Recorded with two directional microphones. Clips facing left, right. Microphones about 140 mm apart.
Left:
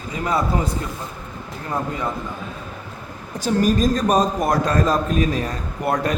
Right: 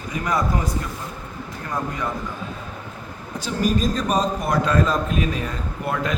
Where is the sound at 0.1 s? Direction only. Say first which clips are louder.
Left 2 dB; 25° left (ahead or behind).